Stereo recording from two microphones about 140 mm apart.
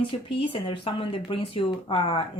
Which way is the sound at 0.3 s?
40° left (ahead or behind).